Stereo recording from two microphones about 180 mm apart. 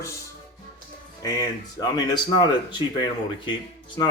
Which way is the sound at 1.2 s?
20° left (ahead or behind).